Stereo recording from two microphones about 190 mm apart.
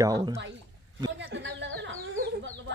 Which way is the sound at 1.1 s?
70° right (ahead or behind).